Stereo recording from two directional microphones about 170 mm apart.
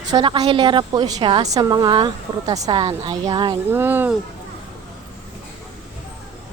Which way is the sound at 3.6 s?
10° right (ahead or behind).